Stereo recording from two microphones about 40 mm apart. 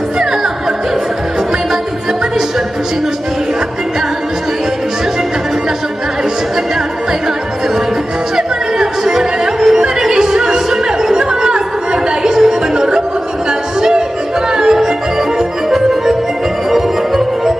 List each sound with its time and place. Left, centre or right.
8.4 s music: centre
13.5 s a sound: centre
14.5 s music: centre